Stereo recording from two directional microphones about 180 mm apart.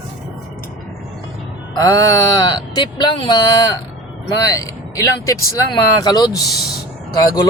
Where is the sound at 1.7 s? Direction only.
20° left (ahead or behind).